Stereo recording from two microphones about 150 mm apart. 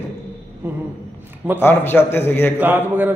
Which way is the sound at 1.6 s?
15° left (ahead or behind).